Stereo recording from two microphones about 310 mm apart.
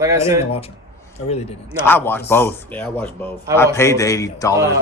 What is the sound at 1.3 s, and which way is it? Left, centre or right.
Speech, centre.